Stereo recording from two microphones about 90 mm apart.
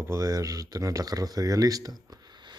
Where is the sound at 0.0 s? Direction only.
35° right (ahead or behind).